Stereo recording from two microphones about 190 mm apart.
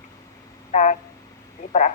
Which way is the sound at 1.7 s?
40° left (ahead or behind).